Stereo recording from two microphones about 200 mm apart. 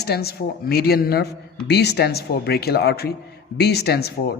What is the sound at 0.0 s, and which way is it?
A man's voice, 50° left (ahead or behind).